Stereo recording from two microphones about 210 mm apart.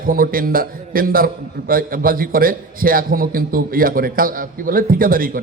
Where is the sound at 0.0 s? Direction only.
45° right (ahead or behind).